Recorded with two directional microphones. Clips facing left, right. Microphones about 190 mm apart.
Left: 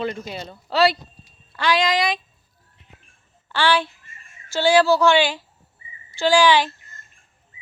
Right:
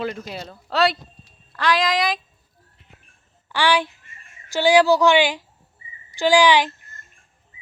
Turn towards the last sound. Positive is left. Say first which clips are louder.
# right 1 dB
turn(degrees=-15)  # may be behind; listen again after turning